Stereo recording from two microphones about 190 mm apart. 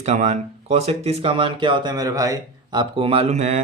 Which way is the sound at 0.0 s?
35° right (ahead or behind).